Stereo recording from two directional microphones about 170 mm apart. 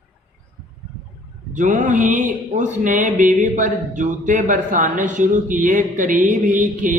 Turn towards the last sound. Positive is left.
turn(degrees=-50)  # may be behind; listen again after turning